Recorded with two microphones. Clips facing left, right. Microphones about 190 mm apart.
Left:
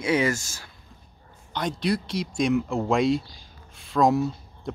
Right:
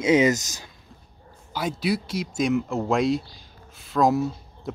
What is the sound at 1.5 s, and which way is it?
Speech, 5° right (ahead or behind).